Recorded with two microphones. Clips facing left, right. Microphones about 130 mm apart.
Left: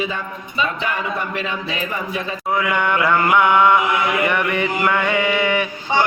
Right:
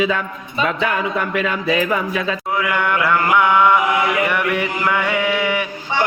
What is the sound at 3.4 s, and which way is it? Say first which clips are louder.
Chant: even; 15° left (ahead or behind).